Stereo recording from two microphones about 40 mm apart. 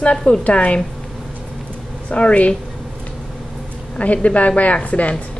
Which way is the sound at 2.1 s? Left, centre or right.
Left.